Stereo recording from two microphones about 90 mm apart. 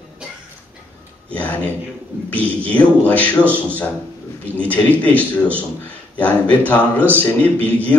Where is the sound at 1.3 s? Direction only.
15° left (ahead or behind).